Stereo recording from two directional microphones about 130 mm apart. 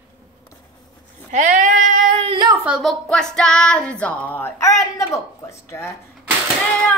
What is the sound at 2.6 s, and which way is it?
Music, 5° right (ahead or behind).